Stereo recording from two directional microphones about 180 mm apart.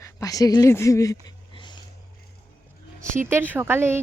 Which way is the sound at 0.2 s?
20° left (ahead or behind).